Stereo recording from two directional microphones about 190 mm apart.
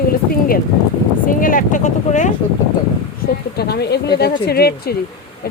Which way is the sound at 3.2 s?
55° left (ahead or behind).